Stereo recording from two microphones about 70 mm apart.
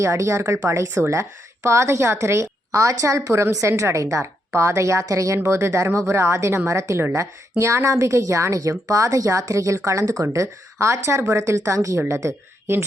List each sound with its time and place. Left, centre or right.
0.0 s a woman's voice: right